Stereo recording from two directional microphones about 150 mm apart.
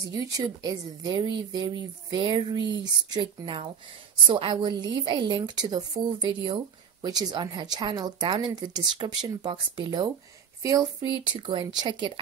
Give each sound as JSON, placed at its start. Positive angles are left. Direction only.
{"t": 0.1, "sound": "a woman's voice", "side_deg": -25}
{"t": 11.0, "sound": "a woman's voice", "side_deg": -35}